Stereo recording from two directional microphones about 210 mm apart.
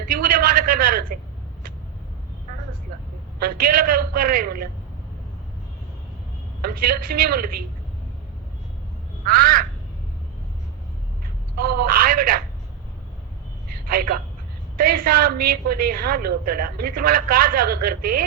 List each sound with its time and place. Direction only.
0.0 s a sound: 45° right (ahead or behind)
3.4 s a woman's voice: 45° right (ahead or behind)
6.6 s a woman's voice: 45° right (ahead or behind)
9.2 s a woman's voice: 45° right (ahead or behind)
11.5 s telephone: 45° right (ahead or behind)
13.8 s a man's voice: 45° right (ahead or behind)